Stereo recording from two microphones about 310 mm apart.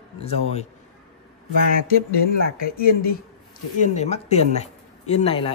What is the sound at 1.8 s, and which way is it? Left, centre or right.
Speech, left.